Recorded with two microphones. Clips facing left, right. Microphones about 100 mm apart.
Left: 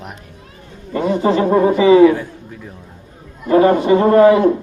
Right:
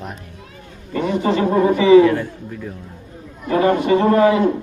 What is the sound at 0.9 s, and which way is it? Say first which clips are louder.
A man's voice: left 3 dB; 25° left (ahead or behind).